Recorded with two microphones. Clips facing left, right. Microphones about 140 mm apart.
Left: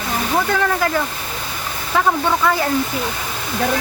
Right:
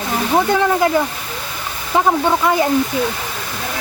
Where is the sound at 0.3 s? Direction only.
20° right (ahead or behind).